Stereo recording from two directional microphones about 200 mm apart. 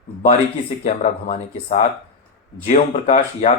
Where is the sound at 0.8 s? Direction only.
35° left (ahead or behind).